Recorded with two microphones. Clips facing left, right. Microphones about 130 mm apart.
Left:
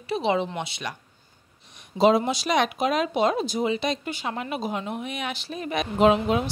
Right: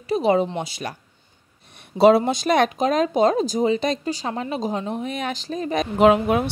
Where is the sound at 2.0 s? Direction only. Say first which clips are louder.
Right 5 dB; 60° right (ahead or behind).